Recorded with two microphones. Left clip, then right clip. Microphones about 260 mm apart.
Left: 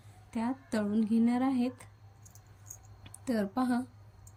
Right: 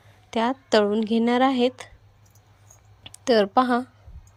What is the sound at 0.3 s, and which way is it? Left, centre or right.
Speech, right.